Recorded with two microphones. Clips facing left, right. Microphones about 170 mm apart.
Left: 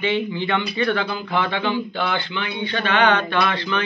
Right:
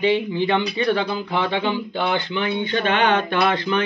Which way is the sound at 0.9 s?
25° right (ahead or behind).